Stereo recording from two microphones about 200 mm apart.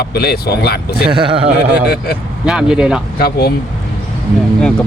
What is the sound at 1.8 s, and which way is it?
Speech, 55° left (ahead or behind).